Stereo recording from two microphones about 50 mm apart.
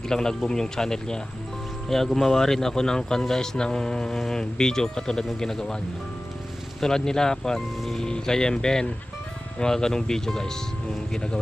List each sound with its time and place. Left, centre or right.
0.1 s speech: centre